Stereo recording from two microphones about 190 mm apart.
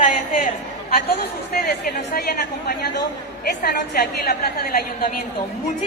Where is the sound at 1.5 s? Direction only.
55° left (ahead or behind).